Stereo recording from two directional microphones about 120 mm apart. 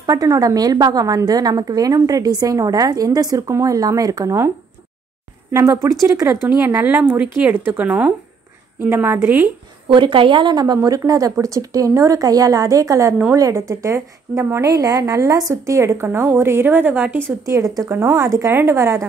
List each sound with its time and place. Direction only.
0.0 s a woman's voice: 30° right (ahead or behind)
5.5 s a woman's voice: 25° right (ahead or behind)
9.8 s a woman's voice: 45° right (ahead or behind); by 17.2 s 15° right (ahead or behind)
17.5 s a woman's voice: 30° right (ahead or behind)